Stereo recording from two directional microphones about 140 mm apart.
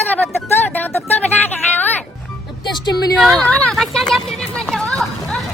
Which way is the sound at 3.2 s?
Centre (ahead or behind).